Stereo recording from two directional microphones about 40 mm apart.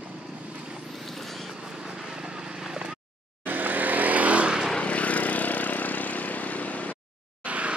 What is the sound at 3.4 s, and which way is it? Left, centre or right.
Vehicle, right.